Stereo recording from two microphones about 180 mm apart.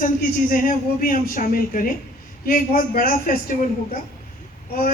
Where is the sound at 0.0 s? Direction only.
50° left (ahead or behind).